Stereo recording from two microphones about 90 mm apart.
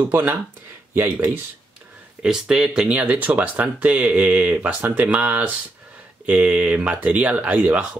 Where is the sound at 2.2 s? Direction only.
10° right (ahead or behind).